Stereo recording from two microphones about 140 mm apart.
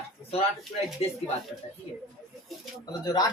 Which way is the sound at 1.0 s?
50° left (ahead or behind).